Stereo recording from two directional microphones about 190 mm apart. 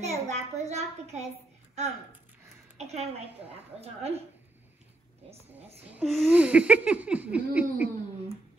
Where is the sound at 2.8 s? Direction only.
35° right (ahead or behind).